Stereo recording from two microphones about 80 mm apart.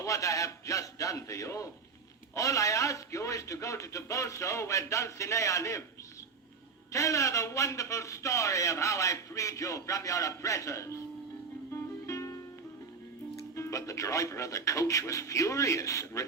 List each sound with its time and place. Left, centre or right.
0.0 s a man's voice: left
6.9 s a man's voice: left
12.0 s music: left
13.6 s a man's voice: left